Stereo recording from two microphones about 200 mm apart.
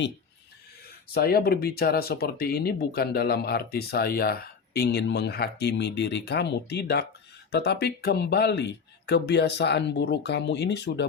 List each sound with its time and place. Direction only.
0.9 s speech: 50° left (ahead or behind)